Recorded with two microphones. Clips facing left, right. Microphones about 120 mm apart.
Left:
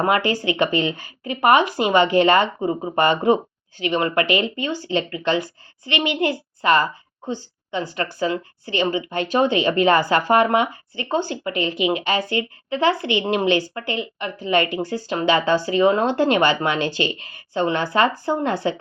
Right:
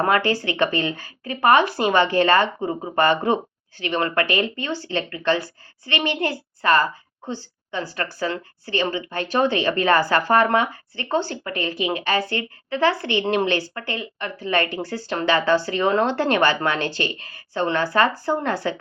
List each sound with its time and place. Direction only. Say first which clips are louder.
0.0 s a woman's voice: even; 15° left (ahead or behind)